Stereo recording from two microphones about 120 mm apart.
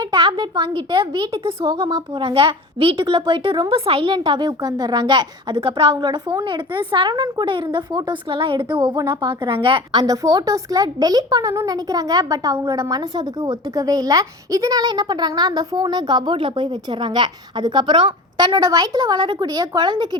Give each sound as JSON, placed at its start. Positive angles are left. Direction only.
{"t": 0.1, "sound": "a woman's voice", "side_deg": -40}
{"t": 10.0, "sound": "a woman's voice", "side_deg": -30}